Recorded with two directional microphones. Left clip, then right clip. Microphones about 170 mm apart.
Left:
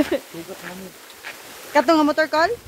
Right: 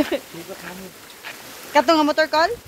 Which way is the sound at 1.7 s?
25° left (ahead or behind).